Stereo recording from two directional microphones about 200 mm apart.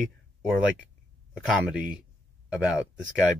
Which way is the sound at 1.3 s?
5° right (ahead or behind).